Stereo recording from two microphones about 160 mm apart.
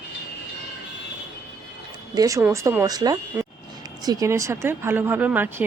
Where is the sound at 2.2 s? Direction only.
20° right (ahead or behind).